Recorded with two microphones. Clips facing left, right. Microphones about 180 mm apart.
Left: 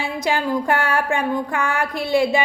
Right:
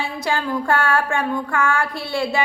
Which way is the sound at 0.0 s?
15° left (ahead or behind).